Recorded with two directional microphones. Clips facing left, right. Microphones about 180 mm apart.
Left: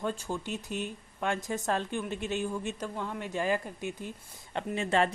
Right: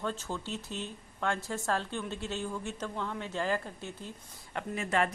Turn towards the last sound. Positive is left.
turn(degrees=30)  # may be behind; listen again after turning